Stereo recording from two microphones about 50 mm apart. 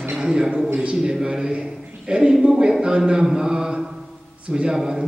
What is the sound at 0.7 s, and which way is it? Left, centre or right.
Speech, right.